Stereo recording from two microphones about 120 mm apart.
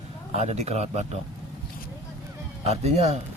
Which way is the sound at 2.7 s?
65° right (ahead or behind).